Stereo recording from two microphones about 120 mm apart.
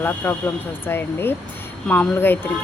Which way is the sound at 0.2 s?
15° left (ahead or behind).